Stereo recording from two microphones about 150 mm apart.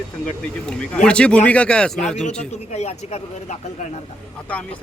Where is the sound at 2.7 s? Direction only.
45° left (ahead or behind).